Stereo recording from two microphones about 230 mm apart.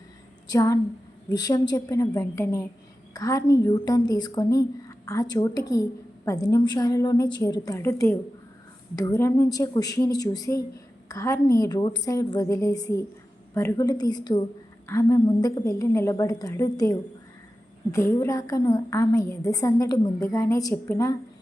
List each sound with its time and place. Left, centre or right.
0.5 s a woman's voice: centre